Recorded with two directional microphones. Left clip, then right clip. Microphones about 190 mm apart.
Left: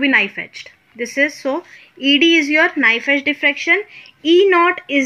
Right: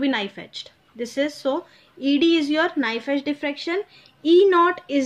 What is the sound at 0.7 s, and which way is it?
Speech, 10° left (ahead or behind).